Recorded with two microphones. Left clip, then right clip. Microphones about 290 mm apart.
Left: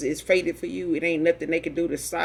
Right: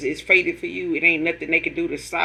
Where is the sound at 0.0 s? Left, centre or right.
Left.